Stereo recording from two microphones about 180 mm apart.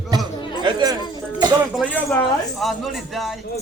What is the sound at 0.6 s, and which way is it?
Speech, 25° right (ahead or behind).